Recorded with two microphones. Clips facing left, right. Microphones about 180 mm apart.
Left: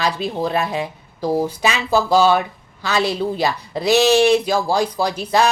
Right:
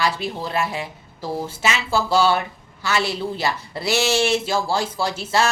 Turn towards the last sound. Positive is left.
turn(degrees=15)  # may be behind; listen again after turning